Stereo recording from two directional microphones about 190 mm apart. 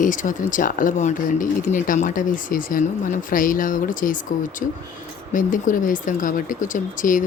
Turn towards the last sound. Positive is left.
turn(degrees=45)  # may be behind; listen again after turning